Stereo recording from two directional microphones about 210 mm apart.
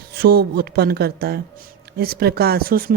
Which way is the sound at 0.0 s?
45° right (ahead or behind).